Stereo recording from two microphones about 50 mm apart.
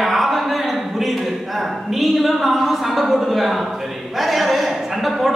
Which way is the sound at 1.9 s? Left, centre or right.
Centre.